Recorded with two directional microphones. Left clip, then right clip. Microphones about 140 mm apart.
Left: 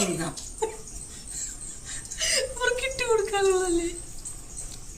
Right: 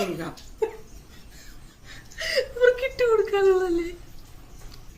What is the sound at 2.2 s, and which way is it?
Whimper, 20° left (ahead or behind).